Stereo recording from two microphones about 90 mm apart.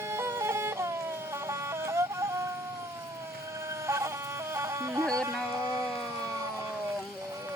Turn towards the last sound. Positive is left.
turn(degrees=-40)  # may be behind; listen again after turning